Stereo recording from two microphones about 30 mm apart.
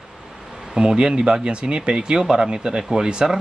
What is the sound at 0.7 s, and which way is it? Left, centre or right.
Speech, right.